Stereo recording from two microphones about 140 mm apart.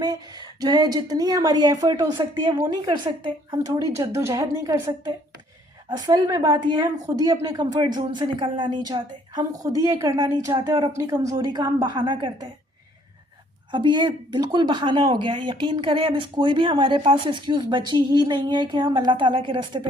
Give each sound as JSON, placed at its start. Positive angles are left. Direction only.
{"t": 0.0, "sound": "a woman's voice", "side_deg": -30}
{"t": 13.7, "sound": "speech", "side_deg": -35}